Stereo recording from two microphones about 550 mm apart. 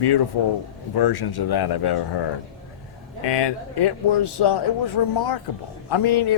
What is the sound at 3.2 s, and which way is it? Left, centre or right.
Speech, left.